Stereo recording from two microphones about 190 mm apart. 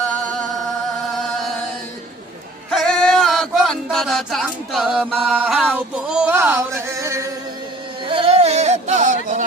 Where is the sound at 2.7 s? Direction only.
Centre (ahead or behind); by 7.3 s 15° right (ahead or behind).